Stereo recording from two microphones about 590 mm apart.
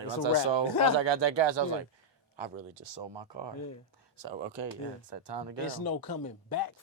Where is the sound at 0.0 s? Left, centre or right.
Right.